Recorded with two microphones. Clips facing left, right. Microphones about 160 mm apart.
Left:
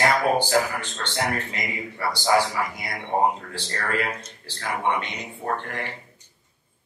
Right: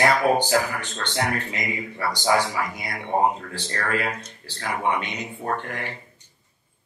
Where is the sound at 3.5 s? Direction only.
15° right (ahead or behind).